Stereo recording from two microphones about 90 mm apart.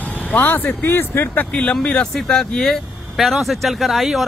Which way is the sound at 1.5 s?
10° left (ahead or behind).